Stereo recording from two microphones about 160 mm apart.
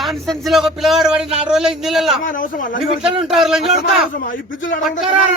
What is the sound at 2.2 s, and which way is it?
Speech, 55° left (ahead or behind).